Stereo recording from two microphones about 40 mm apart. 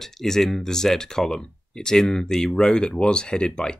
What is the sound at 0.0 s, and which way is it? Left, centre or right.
Speech, centre.